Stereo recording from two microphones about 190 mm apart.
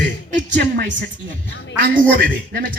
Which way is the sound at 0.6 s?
60° right (ahead or behind).